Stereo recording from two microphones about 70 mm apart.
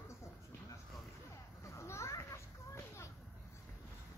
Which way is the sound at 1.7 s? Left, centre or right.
Left.